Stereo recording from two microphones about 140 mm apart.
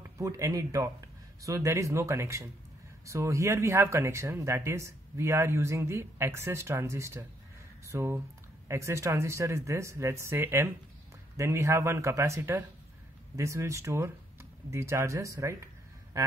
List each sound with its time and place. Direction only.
0.0 s speech: 20° right (ahead or behind)